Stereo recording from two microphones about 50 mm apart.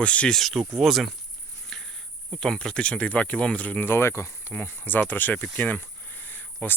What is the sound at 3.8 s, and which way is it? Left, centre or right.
Speech, left.